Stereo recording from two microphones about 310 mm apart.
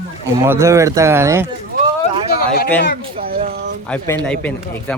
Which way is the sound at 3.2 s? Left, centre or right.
Right.